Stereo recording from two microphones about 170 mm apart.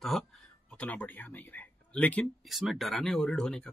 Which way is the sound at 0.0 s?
Centre (ahead or behind).